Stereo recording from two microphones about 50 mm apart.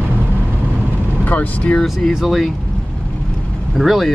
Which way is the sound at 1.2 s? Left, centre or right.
Left.